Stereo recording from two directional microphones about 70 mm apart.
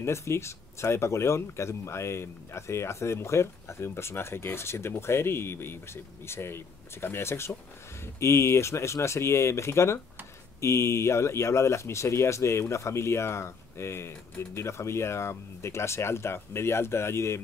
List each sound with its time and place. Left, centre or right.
0.0 s speech: left